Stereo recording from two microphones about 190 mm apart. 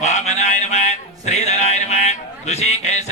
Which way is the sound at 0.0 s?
40° left (ahead or behind).